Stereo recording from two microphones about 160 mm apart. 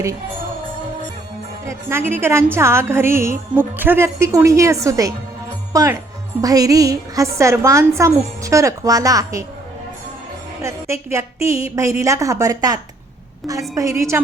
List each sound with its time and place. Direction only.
1.6 s a woman's voice: 15° right (ahead or behind)
10.6 s a woman's voice: 15° right (ahead or behind)